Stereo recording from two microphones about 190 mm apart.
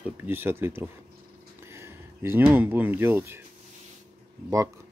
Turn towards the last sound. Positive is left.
turn(degrees=-15)  # may be behind; listen again after turning